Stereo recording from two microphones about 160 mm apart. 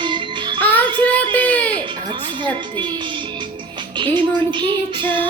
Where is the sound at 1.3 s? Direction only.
10° left (ahead or behind).